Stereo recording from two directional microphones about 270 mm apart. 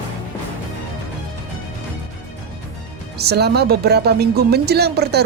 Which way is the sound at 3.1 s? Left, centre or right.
Right.